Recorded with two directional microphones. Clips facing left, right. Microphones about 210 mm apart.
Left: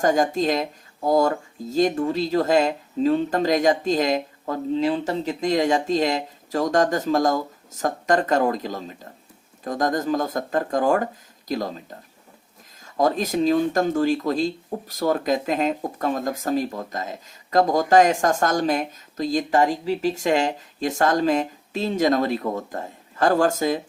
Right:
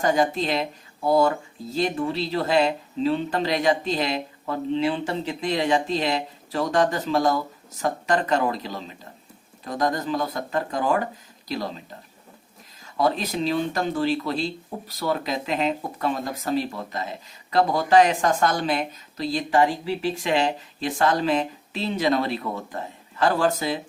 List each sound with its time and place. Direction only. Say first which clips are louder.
0.0 s speech: left 2 dB; 45° left (ahead or behind)
12.8 s speech: left 2 dB; 45° left (ahead or behind)